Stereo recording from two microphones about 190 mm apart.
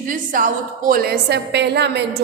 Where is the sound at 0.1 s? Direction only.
45° right (ahead or behind).